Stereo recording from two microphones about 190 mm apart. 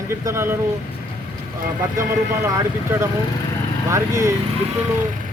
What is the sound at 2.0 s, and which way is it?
Speech, 15° right (ahead or behind).